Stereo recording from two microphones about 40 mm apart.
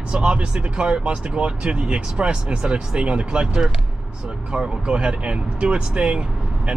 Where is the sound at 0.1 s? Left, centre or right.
Right.